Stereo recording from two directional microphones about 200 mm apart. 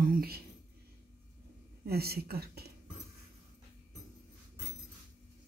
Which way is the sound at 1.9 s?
50° right (ahead or behind).